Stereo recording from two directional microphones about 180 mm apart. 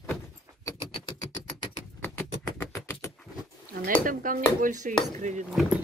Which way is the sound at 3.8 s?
50° right (ahead or behind).